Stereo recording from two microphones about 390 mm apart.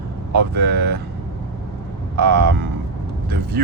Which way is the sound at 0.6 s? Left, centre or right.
Right.